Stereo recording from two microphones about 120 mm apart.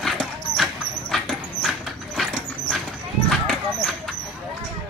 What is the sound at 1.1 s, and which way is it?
Horse, centre (ahead or behind).